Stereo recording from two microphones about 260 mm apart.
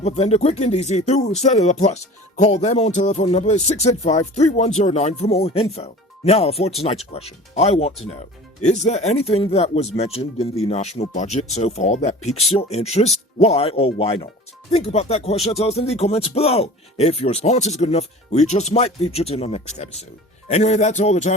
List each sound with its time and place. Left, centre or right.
0.0 s speech: left